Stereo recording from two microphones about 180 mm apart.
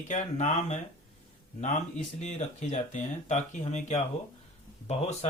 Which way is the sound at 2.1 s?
40° left (ahead or behind).